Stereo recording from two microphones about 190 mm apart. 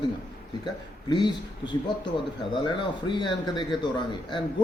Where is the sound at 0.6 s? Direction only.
25° left (ahead or behind).